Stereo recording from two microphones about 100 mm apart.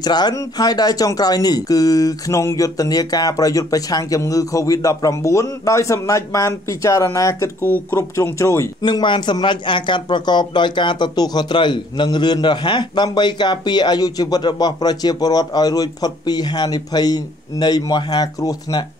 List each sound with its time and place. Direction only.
0.0 s speech: 45° left (ahead or behind)
7.6 s speech: 20° left (ahead or behind)
8.8 s speech: 50° left (ahead or behind)